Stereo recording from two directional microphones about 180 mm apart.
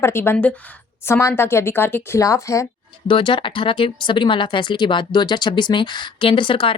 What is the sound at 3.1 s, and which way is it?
Speech, 30° left (ahead or behind).